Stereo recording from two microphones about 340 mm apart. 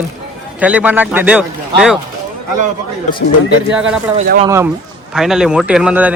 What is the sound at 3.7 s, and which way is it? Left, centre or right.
Speech, centre.